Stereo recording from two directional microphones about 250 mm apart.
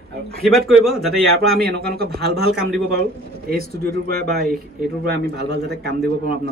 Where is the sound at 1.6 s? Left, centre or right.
Right.